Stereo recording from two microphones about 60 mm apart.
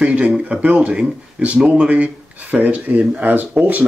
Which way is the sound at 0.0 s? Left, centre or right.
Centre.